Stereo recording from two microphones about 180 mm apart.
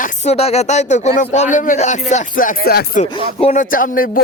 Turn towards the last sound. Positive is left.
turn(degrees=50)  # may be behind; listen again after turning